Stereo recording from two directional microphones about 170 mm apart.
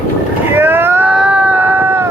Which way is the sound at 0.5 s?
10° right (ahead or behind).